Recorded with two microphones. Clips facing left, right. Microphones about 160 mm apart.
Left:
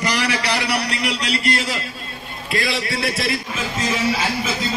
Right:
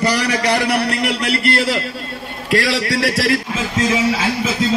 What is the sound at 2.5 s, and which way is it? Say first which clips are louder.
Speech: right 6 dB; 85° right.